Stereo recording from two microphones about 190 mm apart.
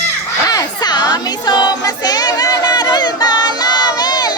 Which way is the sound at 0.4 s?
20° left (ahead or behind).